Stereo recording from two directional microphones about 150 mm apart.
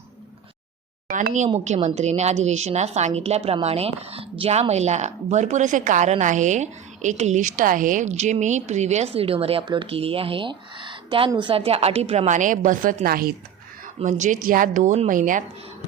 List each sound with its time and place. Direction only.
1.0 s a sound: 75° right (ahead or behind)
1.5 s speech: 50° right (ahead or behind); by 13.3 s 75° right (ahead or behind)
14.0 s a woman's voice: 55° right (ahead or behind)